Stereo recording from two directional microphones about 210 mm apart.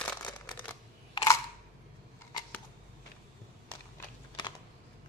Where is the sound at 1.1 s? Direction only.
15° left (ahead or behind).